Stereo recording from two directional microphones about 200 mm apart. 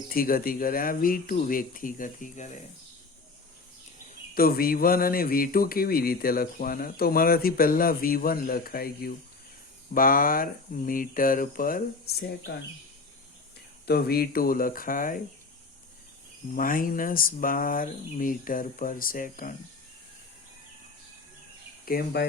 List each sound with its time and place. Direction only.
0.1 s speech: 45° left (ahead or behind)
4.4 s speech: 50° left (ahead or behind)
13.8 s speech: 50° left (ahead or behind)
16.5 s speech: 45° left (ahead or behind)
21.8 s speech: 50° left (ahead or behind)